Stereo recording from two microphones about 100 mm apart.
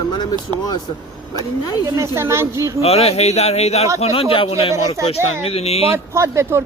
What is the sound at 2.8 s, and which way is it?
A man's voice, 90° left.